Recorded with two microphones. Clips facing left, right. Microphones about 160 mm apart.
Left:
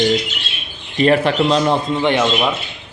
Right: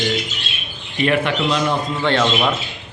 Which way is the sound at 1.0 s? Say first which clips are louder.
Left 4 dB; 35° left (ahead or behind).